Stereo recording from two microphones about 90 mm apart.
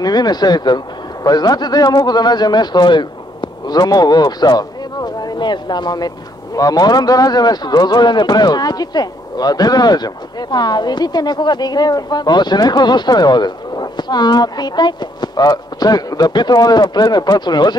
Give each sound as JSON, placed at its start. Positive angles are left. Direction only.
{"t": 0.0, "sound": "speech", "side_deg": 50}